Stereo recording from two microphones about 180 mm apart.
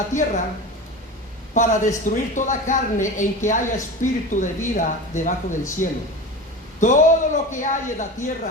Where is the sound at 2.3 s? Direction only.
45° left (ahead or behind).